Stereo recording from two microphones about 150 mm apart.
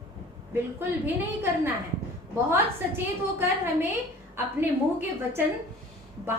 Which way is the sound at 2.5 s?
15° right (ahead or behind).